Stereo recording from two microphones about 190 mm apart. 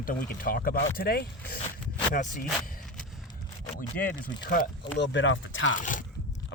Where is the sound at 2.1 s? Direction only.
45° left (ahead or behind).